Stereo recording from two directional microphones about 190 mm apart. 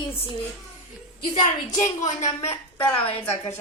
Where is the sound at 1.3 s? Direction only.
40° left (ahead or behind).